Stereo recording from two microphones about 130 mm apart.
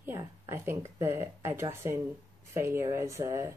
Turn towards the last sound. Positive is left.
turn(degrees=-20)  # may be behind; listen again after turning